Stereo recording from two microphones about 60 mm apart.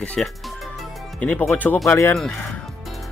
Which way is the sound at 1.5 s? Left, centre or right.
Left.